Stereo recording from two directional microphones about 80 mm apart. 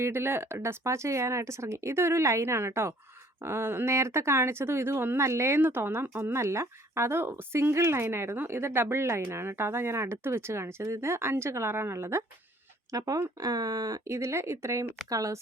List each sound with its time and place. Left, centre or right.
0.0 s speech: right
12.9 s speech: right
14.0 s speech: right